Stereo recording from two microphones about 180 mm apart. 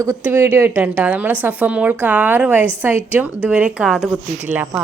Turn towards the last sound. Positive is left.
turn(degrees=-10)  # may be behind; listen again after turning